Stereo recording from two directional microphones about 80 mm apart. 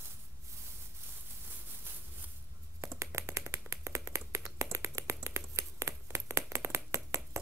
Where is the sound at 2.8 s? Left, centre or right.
Right.